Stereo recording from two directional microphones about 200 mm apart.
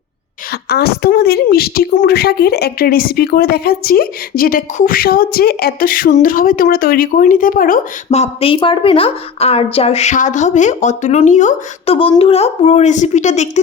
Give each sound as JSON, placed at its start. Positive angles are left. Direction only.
{"t": 0.5, "sound": "a woman's voice", "side_deg": 50}
{"t": 11.9, "sound": "a woman's voice", "side_deg": 25}